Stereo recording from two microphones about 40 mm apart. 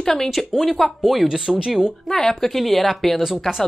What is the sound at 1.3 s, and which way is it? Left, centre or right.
Speech, centre.